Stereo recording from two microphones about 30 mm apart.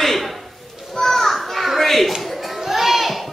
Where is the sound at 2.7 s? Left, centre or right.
Centre.